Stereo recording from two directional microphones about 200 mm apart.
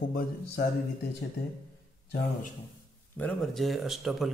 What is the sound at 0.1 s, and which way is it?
Speech, 45° left (ahead or behind).